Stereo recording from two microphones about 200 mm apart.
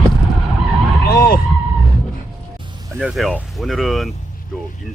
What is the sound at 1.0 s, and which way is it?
Vehicle, 50° left (ahead or behind).